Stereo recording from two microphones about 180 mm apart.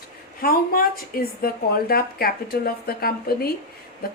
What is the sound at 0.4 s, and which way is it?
Speech, 55° left (ahead or behind).